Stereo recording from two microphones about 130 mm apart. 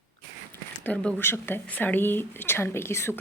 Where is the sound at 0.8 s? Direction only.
10° left (ahead or behind).